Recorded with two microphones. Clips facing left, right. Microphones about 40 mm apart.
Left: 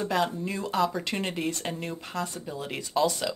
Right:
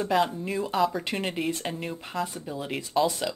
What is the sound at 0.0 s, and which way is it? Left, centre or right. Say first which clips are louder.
Speech: right 2 dB; centre.